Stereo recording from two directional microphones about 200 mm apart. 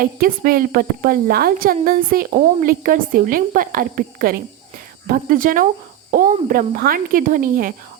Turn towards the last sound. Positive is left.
turn(degrees=-45)  # may be behind; listen again after turning